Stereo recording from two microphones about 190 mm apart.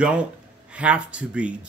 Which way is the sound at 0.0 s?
5° right (ahead or behind).